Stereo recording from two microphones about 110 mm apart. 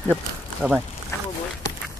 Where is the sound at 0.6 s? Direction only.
15° right (ahead or behind).